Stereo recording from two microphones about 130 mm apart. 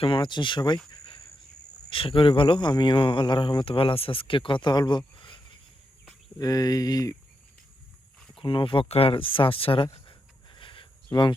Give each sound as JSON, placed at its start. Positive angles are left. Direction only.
{"t": 0.0, "sound": "speech", "side_deg": 40}
{"t": 1.9, "sound": "speech", "side_deg": 45}
{"t": 6.4, "sound": "speech", "side_deg": 30}
{"t": 8.4, "sound": "speech", "side_deg": 45}